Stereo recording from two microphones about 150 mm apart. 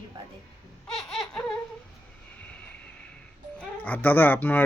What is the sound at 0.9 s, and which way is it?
Baby cry, 5° left (ahead or behind).